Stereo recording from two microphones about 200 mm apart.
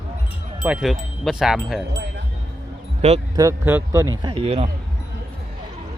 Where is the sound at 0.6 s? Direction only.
5° right (ahead or behind).